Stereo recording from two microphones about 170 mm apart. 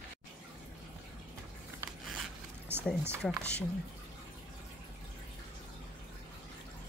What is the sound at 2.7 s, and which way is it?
Speech, 15° right (ahead or behind).